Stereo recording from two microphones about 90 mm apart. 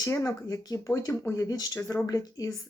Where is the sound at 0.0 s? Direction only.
35° left (ahead or behind).